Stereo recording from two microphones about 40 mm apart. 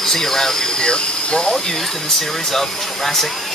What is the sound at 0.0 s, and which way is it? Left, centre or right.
Speech, centre.